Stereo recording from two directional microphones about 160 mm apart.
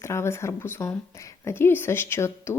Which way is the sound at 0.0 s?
15° left (ahead or behind).